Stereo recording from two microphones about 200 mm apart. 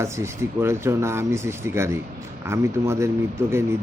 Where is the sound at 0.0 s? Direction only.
15° right (ahead or behind).